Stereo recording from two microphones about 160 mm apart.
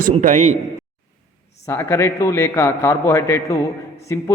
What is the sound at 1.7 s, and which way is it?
A man's voice, 15° left (ahead or behind).